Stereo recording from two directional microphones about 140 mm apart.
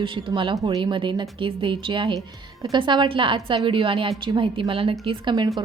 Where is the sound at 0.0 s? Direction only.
35° right (ahead or behind).